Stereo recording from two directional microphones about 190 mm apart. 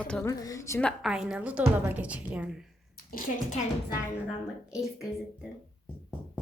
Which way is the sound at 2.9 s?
50° left (ahead or behind).